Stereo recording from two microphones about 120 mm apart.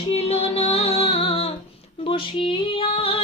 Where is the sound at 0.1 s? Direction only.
60° left (ahead or behind).